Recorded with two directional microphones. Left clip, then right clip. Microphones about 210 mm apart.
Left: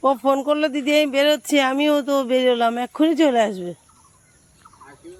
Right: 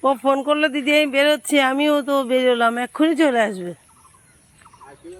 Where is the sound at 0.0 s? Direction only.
Centre (ahead or behind).